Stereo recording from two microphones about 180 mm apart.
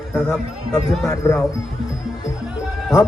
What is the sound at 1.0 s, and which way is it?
Speech, 15° left (ahead or behind).